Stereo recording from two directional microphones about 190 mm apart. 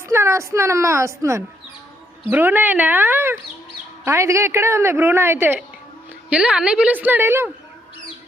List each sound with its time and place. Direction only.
0.1 s speech: 15° right (ahead or behind)